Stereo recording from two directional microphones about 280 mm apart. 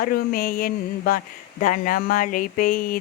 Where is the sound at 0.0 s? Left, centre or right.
Left.